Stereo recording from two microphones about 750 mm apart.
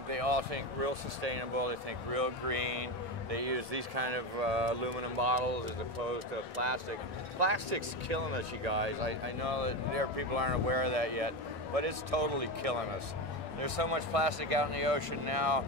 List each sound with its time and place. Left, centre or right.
0.1 s speech: right